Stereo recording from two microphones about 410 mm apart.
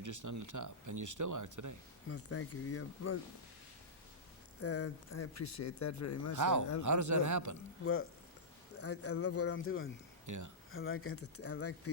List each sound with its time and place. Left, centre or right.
0.0 s speech: right
2.0 s speech: left
4.6 s speech: left
6.3 s speech: right
8.8 s speech: left
10.2 s speech: right
10.7 s speech: left